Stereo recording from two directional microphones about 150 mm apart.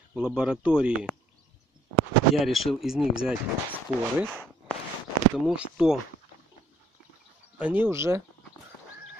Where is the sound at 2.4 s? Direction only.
Centre (ahead or behind).